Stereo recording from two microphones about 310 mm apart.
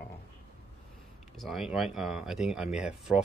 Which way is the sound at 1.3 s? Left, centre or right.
Centre.